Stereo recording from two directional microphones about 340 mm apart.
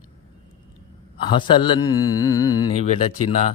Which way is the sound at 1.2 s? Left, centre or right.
Centre.